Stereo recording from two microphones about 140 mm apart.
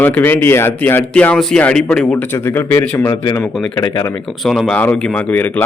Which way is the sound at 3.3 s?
25° left (ahead or behind).